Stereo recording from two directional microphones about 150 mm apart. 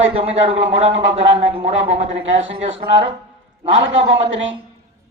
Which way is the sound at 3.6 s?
35° right (ahead or behind).